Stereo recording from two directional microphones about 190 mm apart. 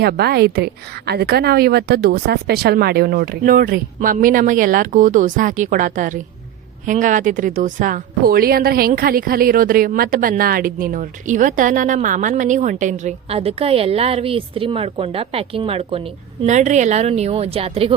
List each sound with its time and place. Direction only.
0.0 s a woman's voice: 55° right (ahead or behind); by 17.9 s 30° right (ahead or behind)